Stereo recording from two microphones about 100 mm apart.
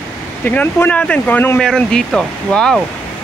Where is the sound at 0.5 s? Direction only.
20° left (ahead or behind).